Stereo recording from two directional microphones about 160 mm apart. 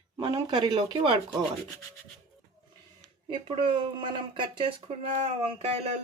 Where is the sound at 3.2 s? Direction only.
35° right (ahead or behind).